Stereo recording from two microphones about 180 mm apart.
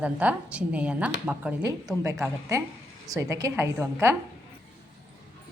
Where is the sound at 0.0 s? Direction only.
5° right (ahead or behind).